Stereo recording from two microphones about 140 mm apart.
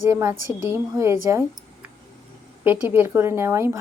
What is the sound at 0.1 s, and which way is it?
A woman's voice, 20° right (ahead or behind).